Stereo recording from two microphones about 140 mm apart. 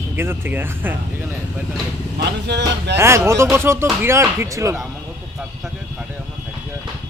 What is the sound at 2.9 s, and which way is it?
Speech, 20° right (ahead or behind).